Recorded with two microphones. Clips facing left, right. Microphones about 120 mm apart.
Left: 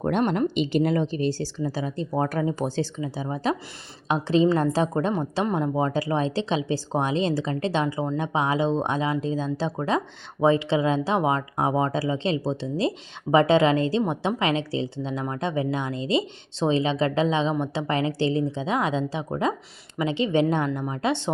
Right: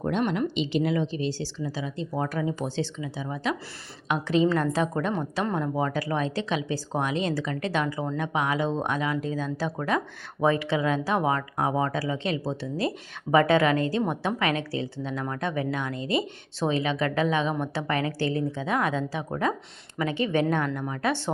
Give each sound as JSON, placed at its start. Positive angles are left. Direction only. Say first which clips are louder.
{"t": 0.0, "sound": "a woman's voice", "louder": "left 3 dB", "side_deg": 50}
{"t": 5.5, "sound": "a woman's voice", "louder": "left 3 dB", "side_deg": 15}